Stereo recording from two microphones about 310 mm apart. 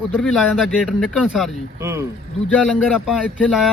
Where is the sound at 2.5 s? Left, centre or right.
Centre.